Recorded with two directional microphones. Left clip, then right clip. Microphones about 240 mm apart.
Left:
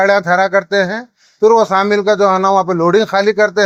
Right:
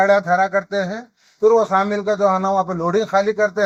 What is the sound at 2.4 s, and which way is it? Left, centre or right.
Speech, left.